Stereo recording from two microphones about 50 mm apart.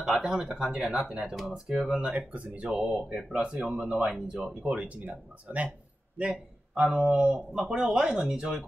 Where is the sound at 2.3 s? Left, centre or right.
Right.